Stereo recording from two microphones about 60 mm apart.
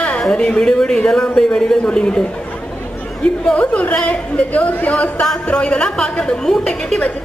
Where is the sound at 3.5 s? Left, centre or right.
Left.